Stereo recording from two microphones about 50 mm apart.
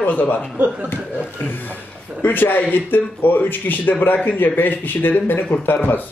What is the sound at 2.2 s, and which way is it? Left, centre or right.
A man's voice, left.